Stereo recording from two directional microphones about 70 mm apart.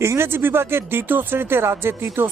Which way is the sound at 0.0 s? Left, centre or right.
Right.